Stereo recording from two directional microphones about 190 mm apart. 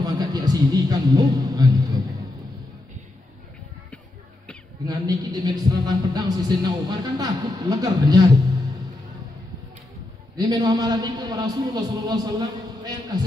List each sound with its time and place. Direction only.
0.0 s music: 20° right (ahead or behind)
4.8 s music: 20° right (ahead or behind)
10.3 s music: 20° right (ahead or behind)